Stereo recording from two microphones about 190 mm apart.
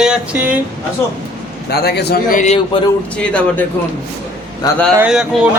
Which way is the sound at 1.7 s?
55° left (ahead or behind).